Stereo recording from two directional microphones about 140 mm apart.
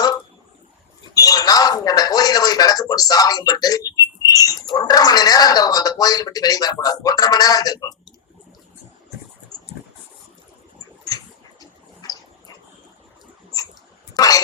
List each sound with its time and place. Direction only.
1.1 s speech: 25° left (ahead or behind)
11.6 s a sound: 25° left (ahead or behind)
14.1 s cough: 25° left (ahead or behind)